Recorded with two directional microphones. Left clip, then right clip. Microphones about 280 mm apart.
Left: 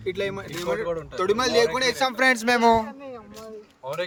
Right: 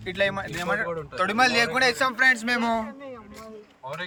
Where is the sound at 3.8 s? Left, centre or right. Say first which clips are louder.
Left 3 dB; left.